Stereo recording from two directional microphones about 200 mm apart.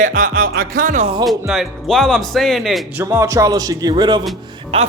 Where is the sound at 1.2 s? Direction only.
Centre (ahead or behind).